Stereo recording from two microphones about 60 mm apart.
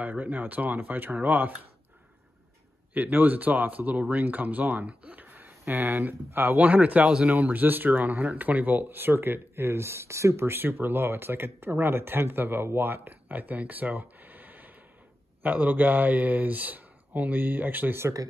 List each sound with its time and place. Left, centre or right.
0.0 s speech: right
2.9 s speech: right
6.6 s speech: right